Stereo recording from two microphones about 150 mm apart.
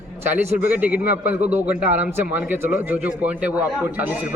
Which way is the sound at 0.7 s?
10° right (ahead or behind).